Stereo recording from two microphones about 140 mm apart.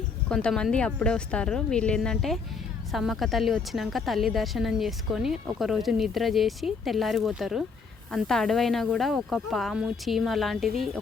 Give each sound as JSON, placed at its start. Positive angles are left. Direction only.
{"t": 0.3, "sound": "a woman's voice", "side_deg": 5}